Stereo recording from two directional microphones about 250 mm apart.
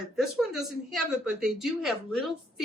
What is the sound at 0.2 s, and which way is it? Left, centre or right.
Speech, centre.